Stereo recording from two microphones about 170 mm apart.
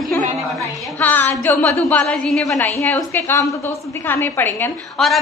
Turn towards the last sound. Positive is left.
turn(degrees=0)  # may be behind; listen again after turning